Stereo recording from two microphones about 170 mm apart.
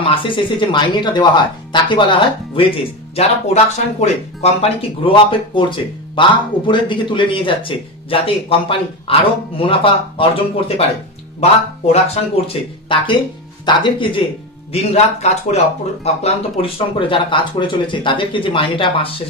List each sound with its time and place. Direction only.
0.0 s speech: 30° left (ahead or behind)